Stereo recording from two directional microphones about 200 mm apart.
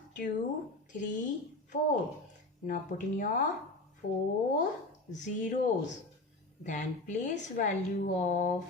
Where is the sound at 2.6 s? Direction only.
40° left (ahead or behind).